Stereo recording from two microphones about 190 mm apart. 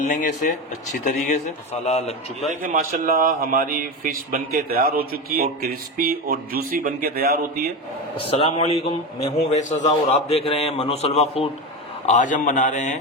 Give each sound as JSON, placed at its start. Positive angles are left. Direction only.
{"t": 0.1, "sound": "a man's voice", "side_deg": 40}
{"t": 2.6, "sound": "speech", "side_deg": -50}
{"t": 8.1, "sound": "a man's voice", "side_deg": 30}